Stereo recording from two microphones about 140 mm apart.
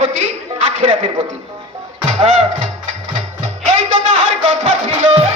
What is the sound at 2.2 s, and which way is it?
Speech, 55° right (ahead or behind).